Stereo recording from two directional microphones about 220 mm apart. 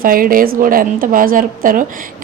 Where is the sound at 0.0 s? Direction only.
40° right (ahead or behind).